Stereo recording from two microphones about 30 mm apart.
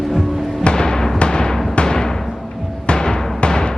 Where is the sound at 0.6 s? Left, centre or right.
Left.